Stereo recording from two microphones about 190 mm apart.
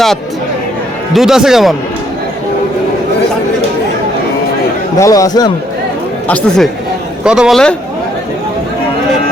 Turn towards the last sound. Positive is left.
turn(degrees=0)  # may be behind; listen again after turning